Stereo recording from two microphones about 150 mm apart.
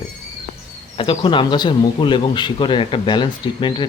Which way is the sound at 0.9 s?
35° left (ahead or behind).